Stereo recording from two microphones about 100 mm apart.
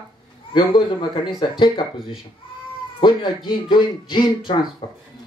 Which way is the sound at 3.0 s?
50° left (ahead or behind).